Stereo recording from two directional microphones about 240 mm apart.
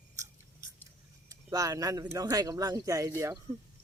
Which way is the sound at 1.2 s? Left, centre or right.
Centre.